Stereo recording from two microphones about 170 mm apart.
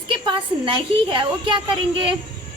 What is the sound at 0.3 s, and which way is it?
A woman's voice, 30° right (ahead or behind).